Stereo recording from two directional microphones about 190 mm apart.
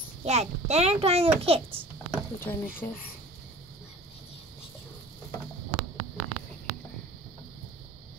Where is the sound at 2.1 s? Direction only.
10° left (ahead or behind).